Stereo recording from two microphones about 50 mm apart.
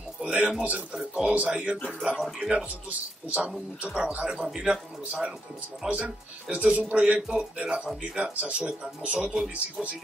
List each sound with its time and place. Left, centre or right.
0.2 s a sound: centre
0.6 s speech: right
0.9 s speech: centre
1.3 s speech: right
2.1 s speech: centre
2.5 s speech: right